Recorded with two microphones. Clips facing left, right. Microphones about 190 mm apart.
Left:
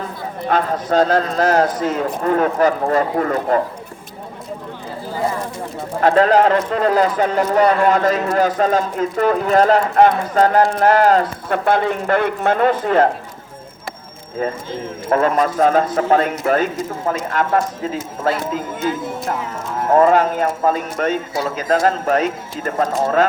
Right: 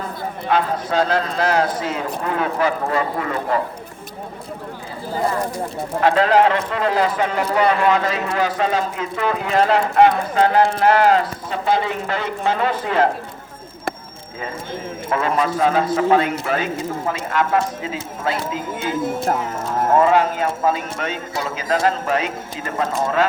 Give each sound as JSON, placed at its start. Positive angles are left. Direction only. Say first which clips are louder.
{"t": 0.4, "sound": "speech", "louder": "left 2 dB", "side_deg": 45}
{"t": 6.0, "sound": "speech", "louder": "left 2 dB", "side_deg": 40}
{"t": 15.1, "sound": "speech", "louder": "left 4 dB", "side_deg": 45}
{"t": 20.0, "sound": "speech", "louder": "left 4 dB", "side_deg": 45}